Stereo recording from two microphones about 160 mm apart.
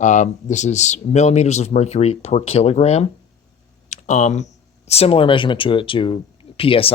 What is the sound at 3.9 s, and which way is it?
Computer keyboard, 45° left (ahead or behind).